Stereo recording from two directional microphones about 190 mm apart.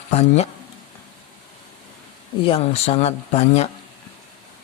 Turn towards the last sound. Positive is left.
turn(degrees=35)  # may be behind; listen again after turning